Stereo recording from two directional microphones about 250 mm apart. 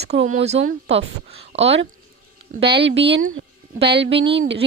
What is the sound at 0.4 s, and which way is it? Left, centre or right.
Speech, right.